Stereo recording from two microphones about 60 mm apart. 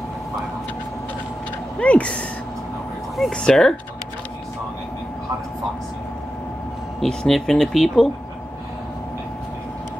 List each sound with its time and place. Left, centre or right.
1.8 s speech: left
3.3 s speech: centre
7.0 s speech: centre